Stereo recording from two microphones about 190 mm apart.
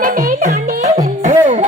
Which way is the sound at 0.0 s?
45° right (ahead or behind).